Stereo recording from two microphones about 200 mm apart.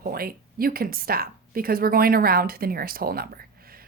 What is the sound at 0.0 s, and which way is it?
Speech, 50° right (ahead or behind).